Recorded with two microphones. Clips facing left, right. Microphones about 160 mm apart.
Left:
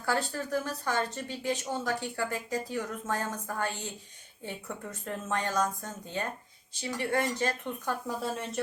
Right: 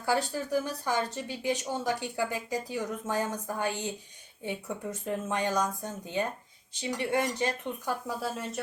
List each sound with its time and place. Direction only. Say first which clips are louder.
0.0 s speech: right 2 dB; 15° right (ahead or behind)
5.0 s speech: right 2 dB; 15° right (ahead or behind)